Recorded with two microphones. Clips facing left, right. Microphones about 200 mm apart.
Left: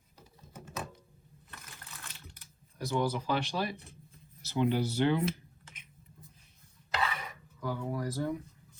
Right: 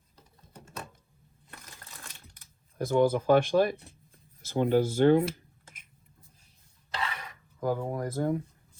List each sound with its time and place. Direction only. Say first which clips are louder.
2.7 s speech: right 7 dB; 50° right (ahead or behind)
7.6 s speech: right 5 dB; 50° right (ahead or behind)